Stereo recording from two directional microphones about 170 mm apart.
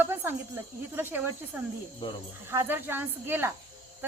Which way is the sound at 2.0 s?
30° left (ahead or behind).